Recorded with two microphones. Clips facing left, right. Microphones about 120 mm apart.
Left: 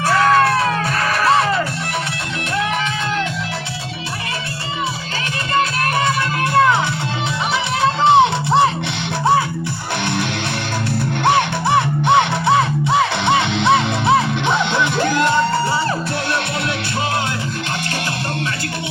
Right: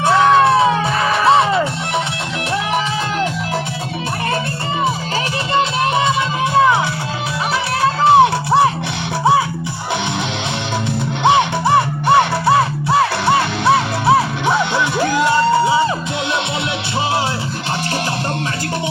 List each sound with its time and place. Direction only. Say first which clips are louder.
0.0 s music: right 3 dB; 20° right (ahead or behind)
6.5 s music: right 1 dB; 10° right (ahead or behind)
7.8 s music: right 1 dB; 5° right (ahead or behind)
11.2 s music: right 3 dB; 15° right (ahead or behind)